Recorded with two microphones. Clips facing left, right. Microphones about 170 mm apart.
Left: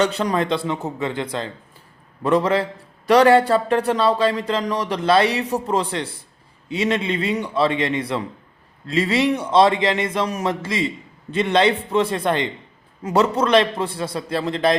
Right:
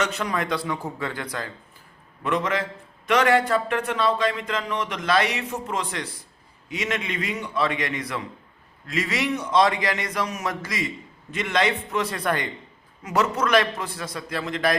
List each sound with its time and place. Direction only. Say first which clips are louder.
0.0 s a man's voice: left 6 dB; 30° left (ahead or behind)